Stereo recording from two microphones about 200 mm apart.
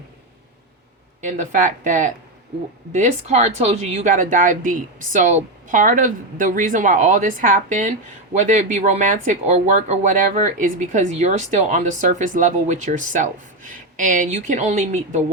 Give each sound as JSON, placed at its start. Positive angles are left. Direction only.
{"t": 1.4, "sound": "speech", "side_deg": -40}